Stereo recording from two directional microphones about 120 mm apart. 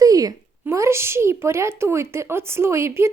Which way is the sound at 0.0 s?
30° right (ahead or behind).